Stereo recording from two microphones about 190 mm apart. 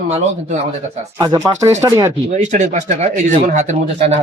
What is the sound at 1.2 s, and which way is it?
Speech, 20° right (ahead or behind).